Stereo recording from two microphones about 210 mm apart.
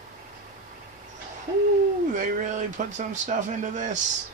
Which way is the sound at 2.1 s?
35° right (ahead or behind).